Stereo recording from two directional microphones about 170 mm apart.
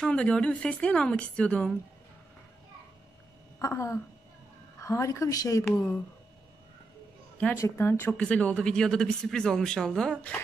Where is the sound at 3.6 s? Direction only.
15° left (ahead or behind).